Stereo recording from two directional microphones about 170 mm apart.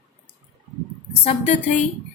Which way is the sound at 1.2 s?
45° left (ahead or behind).